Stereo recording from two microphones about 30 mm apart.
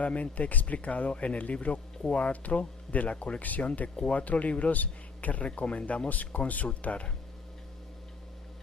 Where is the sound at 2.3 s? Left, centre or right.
Left.